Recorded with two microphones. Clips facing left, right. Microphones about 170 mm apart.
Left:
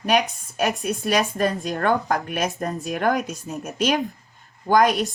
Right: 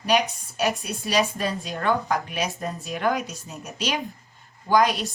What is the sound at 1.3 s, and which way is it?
Speech, 50° left (ahead or behind).